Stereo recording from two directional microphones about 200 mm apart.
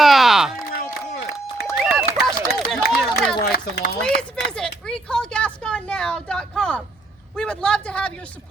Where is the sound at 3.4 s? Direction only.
55° left (ahead or behind).